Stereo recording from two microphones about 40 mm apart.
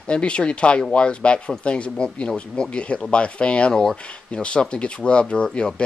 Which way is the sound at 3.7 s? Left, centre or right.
Centre.